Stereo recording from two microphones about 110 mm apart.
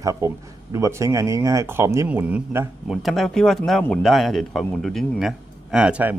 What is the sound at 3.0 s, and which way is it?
Speech, centre (ahead or behind).